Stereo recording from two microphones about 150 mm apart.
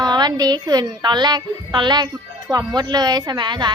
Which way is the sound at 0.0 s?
25° right (ahead or behind).